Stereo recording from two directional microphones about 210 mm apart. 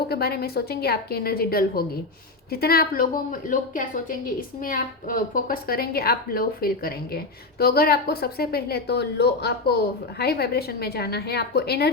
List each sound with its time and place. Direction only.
0.1 s a woman's voice: 50° left (ahead or behind)